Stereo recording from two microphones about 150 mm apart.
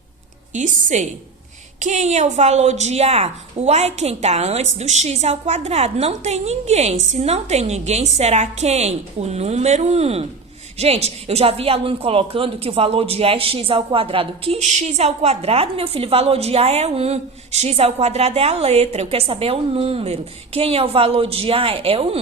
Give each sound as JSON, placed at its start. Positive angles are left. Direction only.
{"t": 0.5, "sound": "a woman's voice", "side_deg": -55}